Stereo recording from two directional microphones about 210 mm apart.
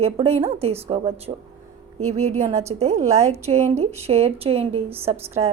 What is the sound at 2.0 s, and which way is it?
Speech, 90° right.